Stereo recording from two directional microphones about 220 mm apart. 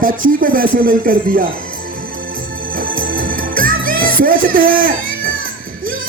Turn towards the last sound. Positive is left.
turn(degrees=-40)  # may be behind; listen again after turning